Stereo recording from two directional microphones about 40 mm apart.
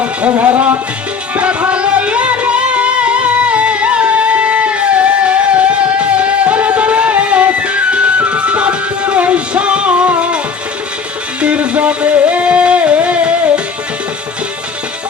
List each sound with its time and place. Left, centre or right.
0.0 s music: right
1.4 s music: right
11.3 s music: right